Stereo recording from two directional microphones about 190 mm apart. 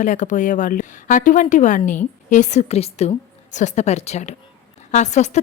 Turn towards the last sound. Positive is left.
turn(degrees=40)  # may be behind; listen again after turning